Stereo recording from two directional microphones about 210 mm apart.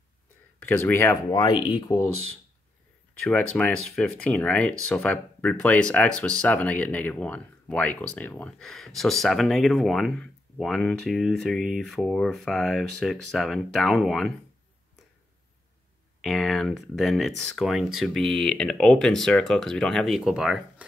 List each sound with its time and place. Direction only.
0.6 s speech: 10° left (ahead or behind)
3.3 s speech: 5° left (ahead or behind)
16.2 s speech: centre (ahead or behind)